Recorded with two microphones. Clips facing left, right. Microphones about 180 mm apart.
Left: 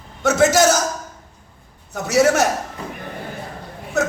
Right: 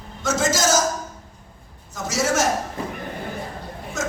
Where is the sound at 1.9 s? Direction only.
60° left (ahead or behind).